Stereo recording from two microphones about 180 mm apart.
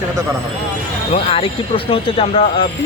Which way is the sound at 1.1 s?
30° left (ahead or behind).